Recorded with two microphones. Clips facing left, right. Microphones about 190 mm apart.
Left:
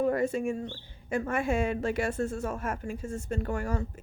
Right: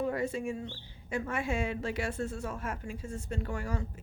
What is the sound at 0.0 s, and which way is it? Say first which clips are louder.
Speech: left 5 dB; 50° left (ahead or behind).